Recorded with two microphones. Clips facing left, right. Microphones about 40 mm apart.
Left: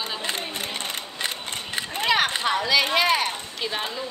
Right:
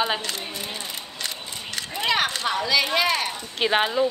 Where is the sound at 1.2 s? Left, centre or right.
Left.